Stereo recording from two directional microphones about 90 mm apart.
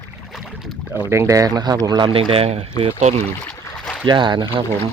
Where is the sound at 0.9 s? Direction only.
30° right (ahead or behind); by 2.1 s 55° right (ahead or behind).